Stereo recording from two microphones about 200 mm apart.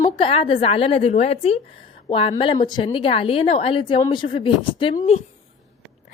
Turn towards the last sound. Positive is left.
turn(degrees=30)  # may be behind; listen again after turning